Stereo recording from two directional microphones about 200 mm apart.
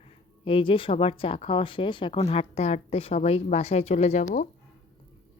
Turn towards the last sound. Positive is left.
turn(degrees=35)  # may be behind; listen again after turning